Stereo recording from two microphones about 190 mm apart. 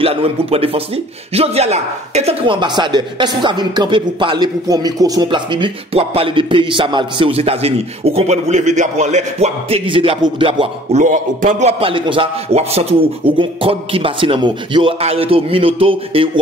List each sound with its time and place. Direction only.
0.0 s speech: 30° right (ahead or behind)